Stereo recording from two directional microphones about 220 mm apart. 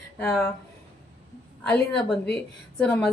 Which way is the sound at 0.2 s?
5° left (ahead or behind).